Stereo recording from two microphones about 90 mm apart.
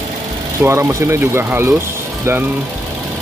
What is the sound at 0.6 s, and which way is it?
Speech, 30° right (ahead or behind).